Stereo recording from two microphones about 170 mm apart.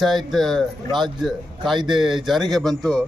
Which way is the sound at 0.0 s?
Centre (ahead or behind).